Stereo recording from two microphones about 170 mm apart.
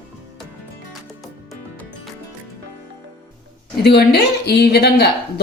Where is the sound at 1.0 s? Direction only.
Centre (ahead or behind).